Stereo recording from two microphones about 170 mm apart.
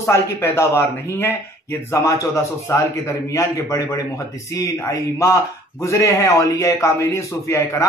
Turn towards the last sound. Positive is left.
turn(degrees=20)  # may be behind; listen again after turning